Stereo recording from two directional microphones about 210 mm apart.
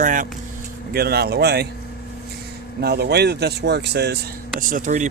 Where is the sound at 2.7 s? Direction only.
50° right (ahead or behind).